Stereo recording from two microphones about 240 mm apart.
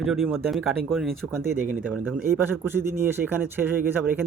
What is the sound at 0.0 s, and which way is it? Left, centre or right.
A man's voice, centre.